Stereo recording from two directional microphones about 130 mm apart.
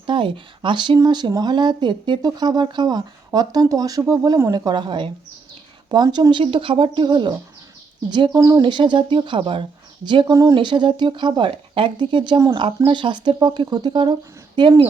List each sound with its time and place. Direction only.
0.0 s speech: 40° right (ahead or behind); by 8.6 s 25° right (ahead or behind)
8.6 s speech: 35° right (ahead or behind)
12.5 s speech: 40° right (ahead or behind)